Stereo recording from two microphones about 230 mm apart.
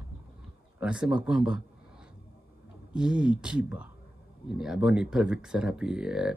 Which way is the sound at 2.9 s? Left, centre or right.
Centre.